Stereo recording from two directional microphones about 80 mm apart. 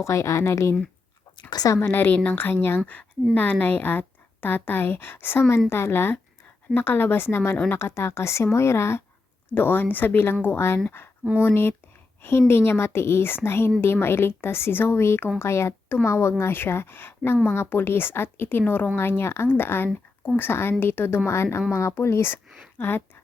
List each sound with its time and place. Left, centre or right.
0.0 s a woman's voice: left
1.5 s speech: left
1.7 s a woman's voice: left